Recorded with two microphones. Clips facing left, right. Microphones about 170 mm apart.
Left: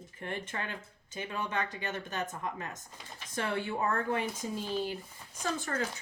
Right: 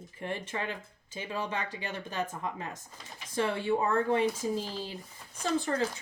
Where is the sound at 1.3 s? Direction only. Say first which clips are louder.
Right 1 dB; 30° right (ahead or behind).